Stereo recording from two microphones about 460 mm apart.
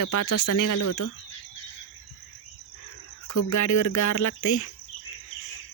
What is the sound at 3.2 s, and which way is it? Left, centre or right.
Speech, left.